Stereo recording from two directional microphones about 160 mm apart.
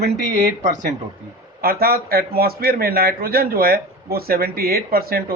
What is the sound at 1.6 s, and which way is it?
A man's voice, 70° right (ahead or behind).